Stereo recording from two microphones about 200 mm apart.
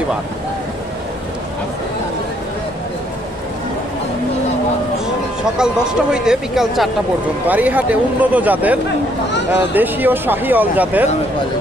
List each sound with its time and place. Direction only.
5.6 s speech: 5° right (ahead or behind)
9.8 s speech: 10° right (ahead or behind)